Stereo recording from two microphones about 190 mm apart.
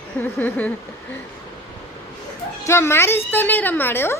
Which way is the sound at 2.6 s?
15° left (ahead or behind).